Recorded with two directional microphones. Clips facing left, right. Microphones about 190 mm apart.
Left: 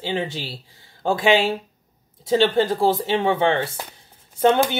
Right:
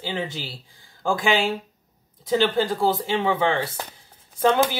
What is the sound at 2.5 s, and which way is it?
Speech, 25° left (ahead or behind).